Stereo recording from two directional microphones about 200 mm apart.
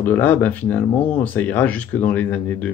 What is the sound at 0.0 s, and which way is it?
Speech, 10° left (ahead or behind).